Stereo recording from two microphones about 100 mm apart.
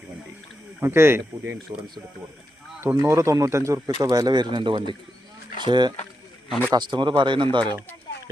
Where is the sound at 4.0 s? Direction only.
40° right (ahead or behind).